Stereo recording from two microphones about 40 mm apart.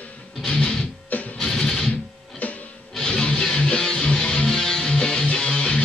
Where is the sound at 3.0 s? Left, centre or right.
Left.